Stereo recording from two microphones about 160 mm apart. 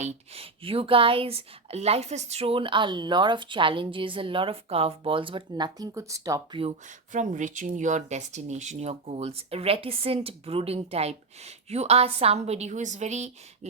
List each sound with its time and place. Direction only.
0.0 s speech: 40° right (ahead or behind); by 6.6 s 20° right (ahead or behind)
7.1 s speech: 50° right (ahead or behind)